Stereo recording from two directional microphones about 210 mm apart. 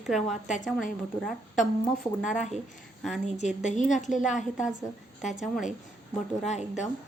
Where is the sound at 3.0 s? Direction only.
Centre (ahead or behind).